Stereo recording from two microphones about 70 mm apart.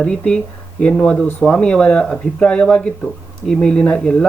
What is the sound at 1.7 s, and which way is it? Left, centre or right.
Speech, centre.